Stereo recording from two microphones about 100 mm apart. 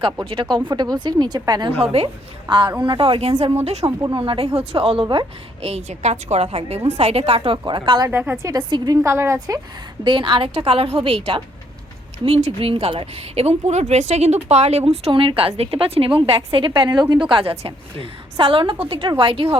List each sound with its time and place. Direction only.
0.3 s speech: 55° right (ahead or behind)
0.7 s speech: 45° right (ahead or behind)
1.8 s a woman's voice: 80° right
2.5 s speech: 50° right (ahead or behind); by 3.9 s 90° right
4.1 s speech: 65° right (ahead or behind)
5.6 s a woman's voice: 90° right; by 8.0 s 50° right (ahead or behind)
8.4 s a woman's voice: 35° right (ahead or behind)
8.7 s speech: 45° right (ahead or behind)
9.0 s a woman's voice: 30° right (ahead or behind)
10.0 s speech: 55° right (ahead or behind)